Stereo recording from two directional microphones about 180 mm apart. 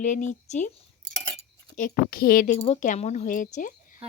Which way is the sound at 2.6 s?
30° left (ahead or behind).